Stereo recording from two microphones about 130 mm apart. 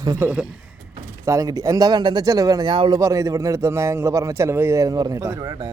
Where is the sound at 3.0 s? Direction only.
25° right (ahead or behind).